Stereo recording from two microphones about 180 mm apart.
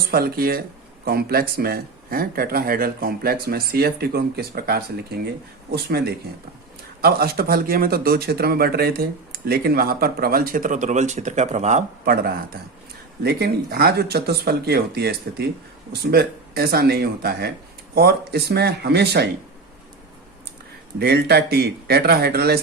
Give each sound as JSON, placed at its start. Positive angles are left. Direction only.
{"t": 0.1, "sound": "speech", "side_deg": -55}
{"t": 12.0, "sound": "speech", "side_deg": -55}
{"t": 21.0, "sound": "speech", "side_deg": -65}